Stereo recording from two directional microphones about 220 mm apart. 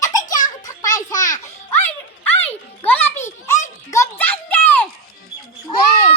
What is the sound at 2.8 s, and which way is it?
Music, 10° left (ahead or behind).